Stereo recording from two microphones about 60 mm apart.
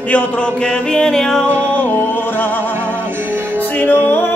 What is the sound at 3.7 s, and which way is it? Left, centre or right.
Music, left.